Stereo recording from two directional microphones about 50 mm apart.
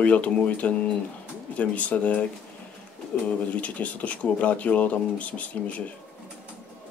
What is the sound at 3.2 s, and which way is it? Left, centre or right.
Speech, left.